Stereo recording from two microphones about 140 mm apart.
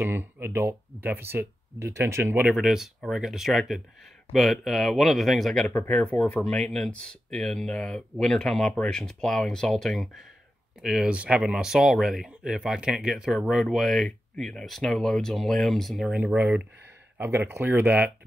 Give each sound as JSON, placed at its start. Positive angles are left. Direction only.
{"t": 0.0, "sound": "speech", "side_deg": -15}
{"t": 2.4, "sound": "speech", "side_deg": -5}
{"t": 5.7, "sound": "speech", "side_deg": 10}